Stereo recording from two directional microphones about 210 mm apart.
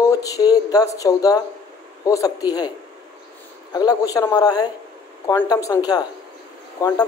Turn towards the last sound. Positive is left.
turn(degrees=15)  # may be behind; listen again after turning